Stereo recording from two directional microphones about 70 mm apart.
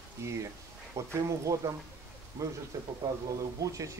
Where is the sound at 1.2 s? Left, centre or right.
Right.